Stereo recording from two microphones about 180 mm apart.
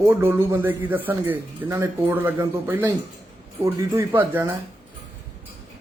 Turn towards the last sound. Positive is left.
turn(degrees=-15)  # may be behind; listen again after turning